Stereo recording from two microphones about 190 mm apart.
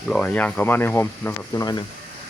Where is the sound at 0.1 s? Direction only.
10° left (ahead or behind).